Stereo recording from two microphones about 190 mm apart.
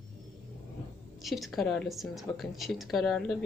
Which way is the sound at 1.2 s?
Centre (ahead or behind).